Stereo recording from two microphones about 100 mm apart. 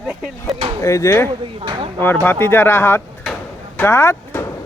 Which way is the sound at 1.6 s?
50° right (ahead or behind).